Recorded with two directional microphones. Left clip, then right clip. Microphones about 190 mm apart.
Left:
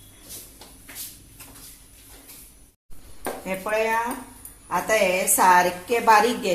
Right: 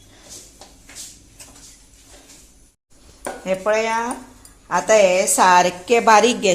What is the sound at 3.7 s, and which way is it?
A woman's voice, 50° right (ahead or behind).